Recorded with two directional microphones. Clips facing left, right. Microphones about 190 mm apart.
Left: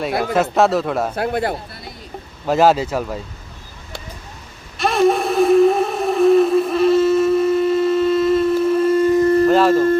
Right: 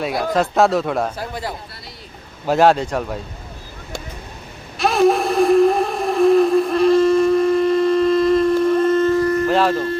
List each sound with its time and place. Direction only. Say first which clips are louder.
0.1 s speech: left 1 dB; 60° left (ahead or behind)
0.3 s speech: even; centre (ahead or behind)
1.1 s speech: left 7 dB; 60° left (ahead or behind)
2.5 s speech: even; centre (ahead or behind)
4.8 s a sound: even; centre (ahead or behind)
9.2 s a sound: left 4 dB; 30° left (ahead or behind)
9.5 s speech: left 4 dB; centre (ahead or behind)